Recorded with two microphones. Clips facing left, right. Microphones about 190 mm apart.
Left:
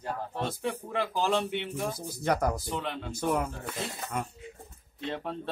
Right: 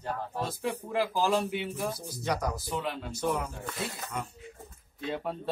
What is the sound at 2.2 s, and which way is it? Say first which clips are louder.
Speech: left 4 dB; 50° left (ahead or behind).